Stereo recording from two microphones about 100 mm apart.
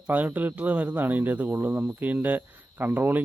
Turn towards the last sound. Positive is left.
turn(degrees=-20)  # may be behind; listen again after turning